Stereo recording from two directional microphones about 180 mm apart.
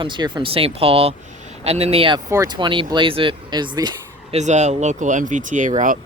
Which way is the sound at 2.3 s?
20° right (ahead or behind).